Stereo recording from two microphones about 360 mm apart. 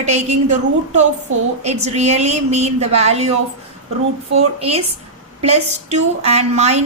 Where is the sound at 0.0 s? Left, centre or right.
Centre.